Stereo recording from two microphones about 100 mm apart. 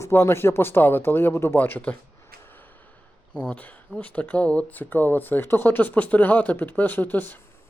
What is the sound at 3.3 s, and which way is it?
Speech, 15° left (ahead or behind).